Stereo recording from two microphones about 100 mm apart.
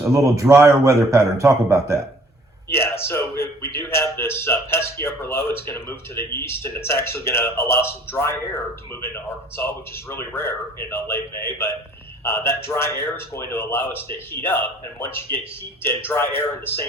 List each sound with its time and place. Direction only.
0.0 s a man's voice: 30° right (ahead or behind)
2.6 s a man's voice: 25° left (ahead or behind)